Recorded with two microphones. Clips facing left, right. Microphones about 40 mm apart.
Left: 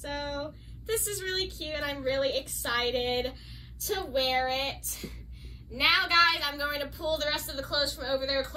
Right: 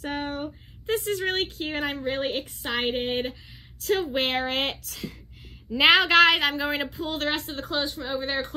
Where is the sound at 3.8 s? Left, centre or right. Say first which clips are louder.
Right 5 dB; right.